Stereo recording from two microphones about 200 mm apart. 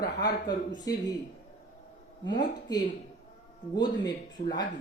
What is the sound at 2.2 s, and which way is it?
Speech, 20° left (ahead or behind).